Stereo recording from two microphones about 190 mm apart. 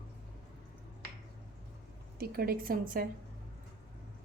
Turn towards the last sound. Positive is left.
turn(degrees=-50)  # may be behind; listen again after turning